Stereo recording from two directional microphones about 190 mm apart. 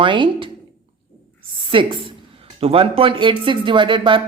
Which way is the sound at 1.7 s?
25° right (ahead or behind).